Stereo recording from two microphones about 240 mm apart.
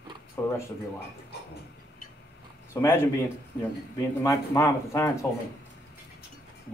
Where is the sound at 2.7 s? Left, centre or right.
Centre.